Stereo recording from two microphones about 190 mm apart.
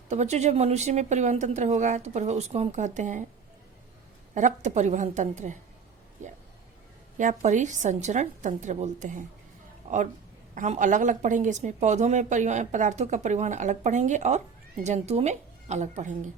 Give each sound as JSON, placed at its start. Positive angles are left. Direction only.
{"t": 0.1, "sound": "a woman's voice", "side_deg": -35}
{"t": 4.4, "sound": "a woman's voice", "side_deg": -40}
{"t": 9.8, "sound": "a sound", "side_deg": -40}
{"t": 10.5, "sound": "a woman's voice", "side_deg": -40}